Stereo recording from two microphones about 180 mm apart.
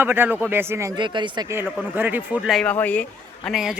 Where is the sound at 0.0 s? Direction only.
10° right (ahead or behind).